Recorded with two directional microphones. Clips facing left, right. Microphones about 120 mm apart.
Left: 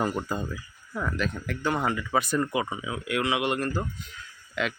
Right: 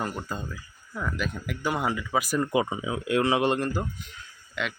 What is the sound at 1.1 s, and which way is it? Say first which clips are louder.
Speech: left 2 dB; 5° right (ahead or behind).